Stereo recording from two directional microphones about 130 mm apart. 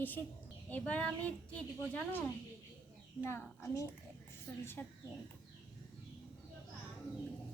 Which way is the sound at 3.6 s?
25° left (ahead or behind).